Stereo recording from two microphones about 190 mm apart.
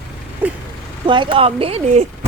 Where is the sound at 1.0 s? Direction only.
25° right (ahead or behind).